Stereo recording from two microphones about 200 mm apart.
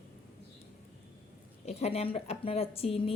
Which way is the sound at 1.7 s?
30° left (ahead or behind).